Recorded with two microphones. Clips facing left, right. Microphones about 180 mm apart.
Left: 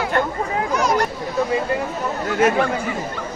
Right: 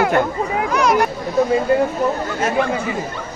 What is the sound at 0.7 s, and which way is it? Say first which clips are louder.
Speech: right 3 dB; 70° right (ahead or behind).